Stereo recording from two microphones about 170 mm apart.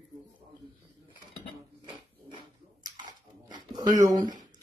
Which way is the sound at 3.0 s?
25° right (ahead or behind).